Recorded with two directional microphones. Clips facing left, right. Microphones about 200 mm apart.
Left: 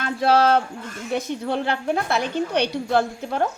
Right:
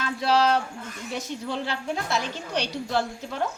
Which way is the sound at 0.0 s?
55° left (ahead or behind).